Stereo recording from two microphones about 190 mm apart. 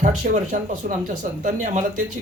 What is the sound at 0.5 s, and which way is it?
Speech, 45° right (ahead or behind).